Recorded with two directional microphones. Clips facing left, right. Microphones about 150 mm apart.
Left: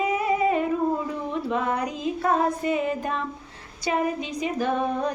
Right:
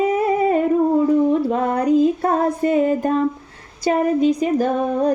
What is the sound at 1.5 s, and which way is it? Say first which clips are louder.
Music: right 8 dB; 40° right (ahead or behind).